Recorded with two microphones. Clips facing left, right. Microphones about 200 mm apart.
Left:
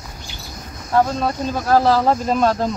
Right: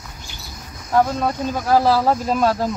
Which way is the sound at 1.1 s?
10° right (ahead or behind).